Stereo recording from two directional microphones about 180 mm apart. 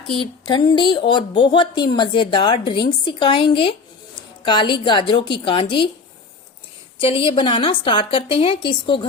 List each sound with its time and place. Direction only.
0.1 s speech: 25° left (ahead or behind)
7.0 s speech: 30° left (ahead or behind)